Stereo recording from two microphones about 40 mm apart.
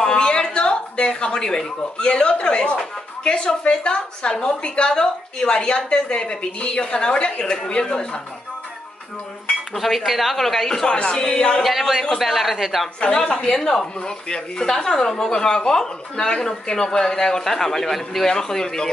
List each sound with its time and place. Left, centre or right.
0.0 s a woman's voice: left
9.8 s speech: centre
10.9 s a woman's voice: left
11.6 s speech: centre
13.0 s a woman's voice: left; by 18.2 s centre
18.2 s a woman's voice: centre